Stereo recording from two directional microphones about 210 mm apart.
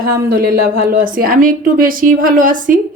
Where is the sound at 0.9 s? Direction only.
40° right (ahead or behind).